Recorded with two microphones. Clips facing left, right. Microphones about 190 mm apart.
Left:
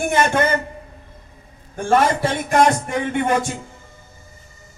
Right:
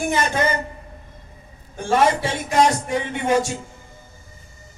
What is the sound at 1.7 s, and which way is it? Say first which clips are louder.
A man's voice: left 1 dB; 55° left (ahead or behind).